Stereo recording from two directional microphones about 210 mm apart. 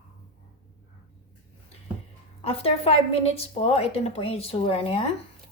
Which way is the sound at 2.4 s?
30° left (ahead or behind).